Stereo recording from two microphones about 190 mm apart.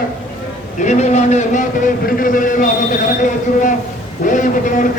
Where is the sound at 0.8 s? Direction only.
35° left (ahead or behind).